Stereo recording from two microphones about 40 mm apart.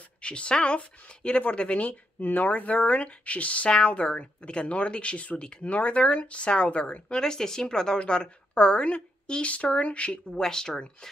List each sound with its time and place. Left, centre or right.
0.2 s speech: left
7.2 s a woman's voice: centre; by 10.2 s left
10.4 s speech: centre